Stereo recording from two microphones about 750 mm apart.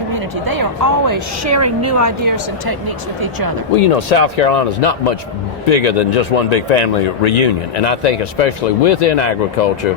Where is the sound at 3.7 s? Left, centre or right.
Left.